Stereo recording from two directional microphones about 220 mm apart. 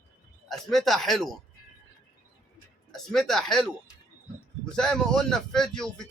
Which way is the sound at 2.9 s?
Centre (ahead or behind).